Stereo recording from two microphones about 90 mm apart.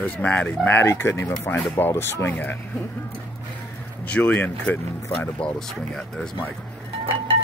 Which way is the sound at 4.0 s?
15° left (ahead or behind).